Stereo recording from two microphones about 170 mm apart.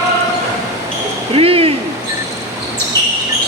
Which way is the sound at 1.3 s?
35° right (ahead or behind).